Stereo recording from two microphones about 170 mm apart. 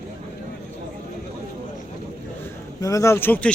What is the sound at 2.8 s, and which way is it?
Speech, 20° left (ahead or behind).